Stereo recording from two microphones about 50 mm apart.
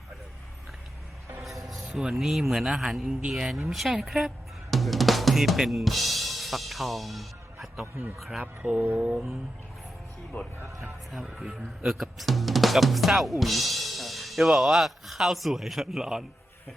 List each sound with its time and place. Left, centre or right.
1.4 s music: centre
2.1 s speech: centre
3.2 s speech: right
3.4 s speech: centre
4.7 s drum kit: centre
8.2 s speech: centre
8.6 s speech: right
10.3 s speech: left
11.9 s speech: centre